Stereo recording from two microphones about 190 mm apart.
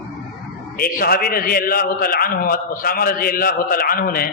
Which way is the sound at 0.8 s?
50° left (ahead or behind).